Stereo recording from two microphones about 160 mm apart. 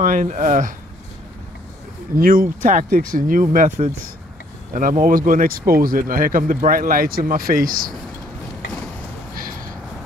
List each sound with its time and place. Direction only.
0.0 s speech: 55° right (ahead or behind)
2.1 s speech: 60° right (ahead or behind)
9.3 s a sound: 60° right (ahead or behind)